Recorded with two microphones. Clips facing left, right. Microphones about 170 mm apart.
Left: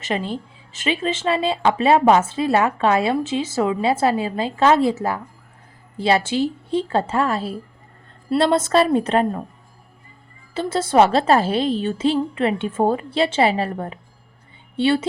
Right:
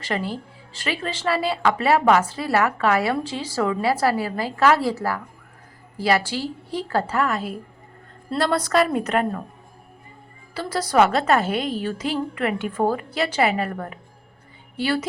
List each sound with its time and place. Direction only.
0.0 s speech: 20° left (ahead or behind)
10.5 s speech: 25° left (ahead or behind)